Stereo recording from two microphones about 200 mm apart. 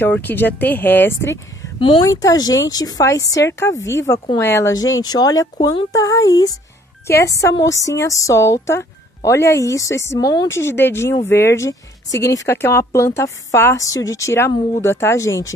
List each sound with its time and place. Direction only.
0.0 s speech: 10° left (ahead or behind)
1.8 s speech: 25° left (ahead or behind)